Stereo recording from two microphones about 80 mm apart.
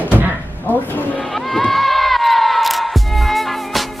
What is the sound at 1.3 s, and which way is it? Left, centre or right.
Music, centre.